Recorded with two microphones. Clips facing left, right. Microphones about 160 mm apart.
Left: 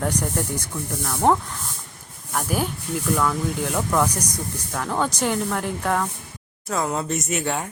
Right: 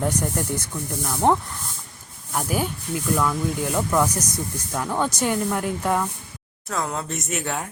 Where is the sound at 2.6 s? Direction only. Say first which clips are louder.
Left 1 dB; centre (ahead or behind).